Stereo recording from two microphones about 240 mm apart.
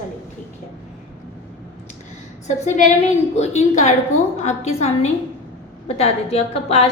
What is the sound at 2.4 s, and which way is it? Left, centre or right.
A woman's voice, left.